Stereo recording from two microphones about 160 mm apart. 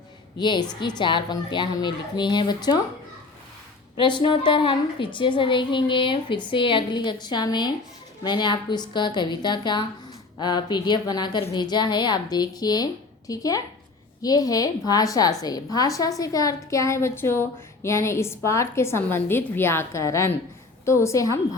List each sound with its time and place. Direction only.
0.3 s a woman's voice: 30° left (ahead or behind)
3.9 s a woman's voice: 30° left (ahead or behind)